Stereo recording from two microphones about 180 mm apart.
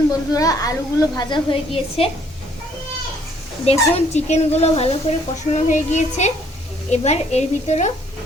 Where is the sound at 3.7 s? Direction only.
35° left (ahead or behind).